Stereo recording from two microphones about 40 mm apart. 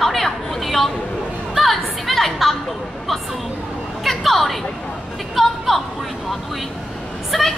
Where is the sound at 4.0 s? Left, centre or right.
Centre.